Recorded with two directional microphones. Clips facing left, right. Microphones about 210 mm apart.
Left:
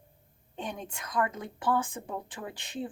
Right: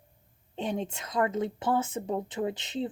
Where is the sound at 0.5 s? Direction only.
25° right (ahead or behind).